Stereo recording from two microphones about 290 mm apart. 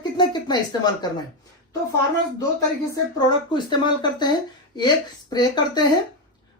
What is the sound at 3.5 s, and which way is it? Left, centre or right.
Speech, centre.